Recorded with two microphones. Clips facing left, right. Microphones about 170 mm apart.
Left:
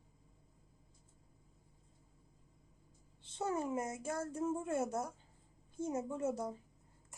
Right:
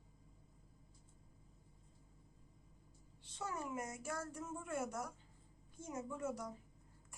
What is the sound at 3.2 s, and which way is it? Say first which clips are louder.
A woman's voice: left 8 dB; 25° left (ahead or behind).